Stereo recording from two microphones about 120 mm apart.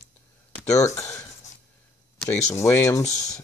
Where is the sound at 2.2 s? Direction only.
20° left (ahead or behind).